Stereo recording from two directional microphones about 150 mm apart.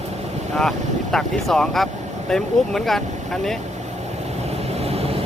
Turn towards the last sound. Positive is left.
turn(degrees=-40)  # may be behind; listen again after turning